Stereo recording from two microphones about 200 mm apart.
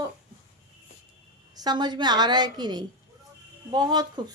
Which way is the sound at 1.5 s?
20° right (ahead or behind).